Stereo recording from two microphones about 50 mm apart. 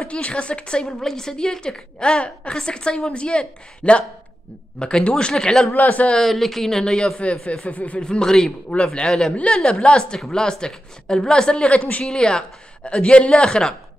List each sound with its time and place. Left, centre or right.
0.0 s a woman's voice: left
0.8 s a woman's voice: centre
5.7 s a man's voice: left
6.1 s a woman's voice: centre
7.4 s a woman's voice: left
8.0 s a woman's voice: centre
12.0 s a woman's voice: centre